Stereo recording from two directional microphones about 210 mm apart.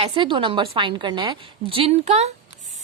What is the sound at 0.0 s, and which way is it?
A woman's voice, 25° right (ahead or behind).